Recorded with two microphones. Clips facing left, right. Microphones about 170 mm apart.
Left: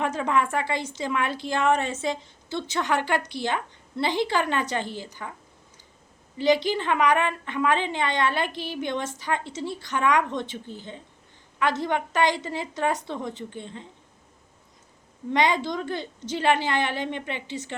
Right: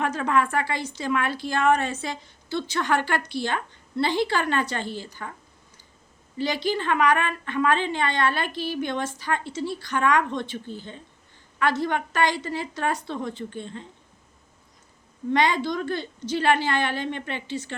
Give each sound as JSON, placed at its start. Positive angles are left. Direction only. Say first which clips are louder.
{"t": 0.0, "sound": "a woman's voice", "louder": "right 1 dB", "side_deg": 20}
{"t": 6.3, "sound": "a woman's voice", "louder": "left 4 dB", "side_deg": 20}
{"t": 15.3, "sound": "a woman's voice", "louder": "right 1 dB", "side_deg": 20}